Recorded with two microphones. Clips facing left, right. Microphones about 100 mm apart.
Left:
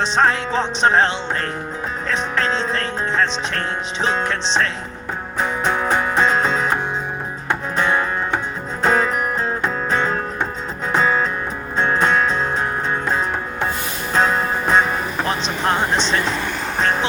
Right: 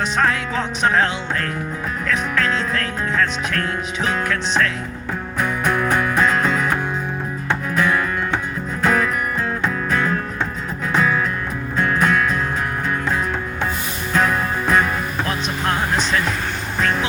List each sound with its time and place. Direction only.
0.0 s music: 30° left (ahead or behind)
7.8 s music: 30° left (ahead or behind)
14.1 s music: 25° left (ahead or behind)